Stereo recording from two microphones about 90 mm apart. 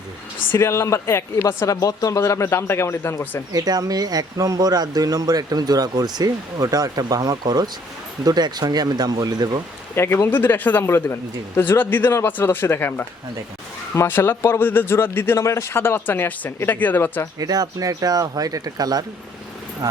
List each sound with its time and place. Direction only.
0.5 s speech: 30° left (ahead or behind)
3.5 s speech: 45° right (ahead or behind)
9.9 s speech: 25° left (ahead or behind)
17.4 s speech: 45° right (ahead or behind)